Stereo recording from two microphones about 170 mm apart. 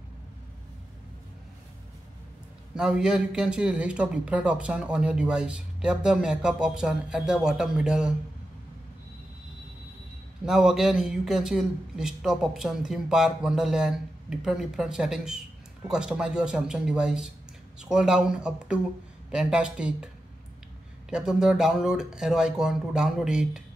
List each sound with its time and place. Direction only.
2.7 s speech: 5° right (ahead or behind)
10.4 s speech: 5° right (ahead or behind)
21.1 s speech: 5° right (ahead or behind)